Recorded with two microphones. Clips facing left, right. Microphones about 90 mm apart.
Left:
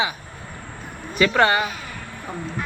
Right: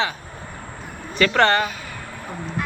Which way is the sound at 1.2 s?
10° left (ahead or behind).